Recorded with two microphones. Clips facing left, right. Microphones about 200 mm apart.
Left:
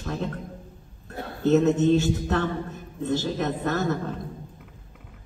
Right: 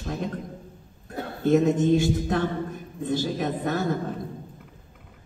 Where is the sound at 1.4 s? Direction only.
15° right (ahead or behind).